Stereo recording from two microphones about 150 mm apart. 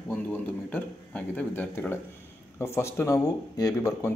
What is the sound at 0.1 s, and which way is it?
Speech, 10° left (ahead or behind).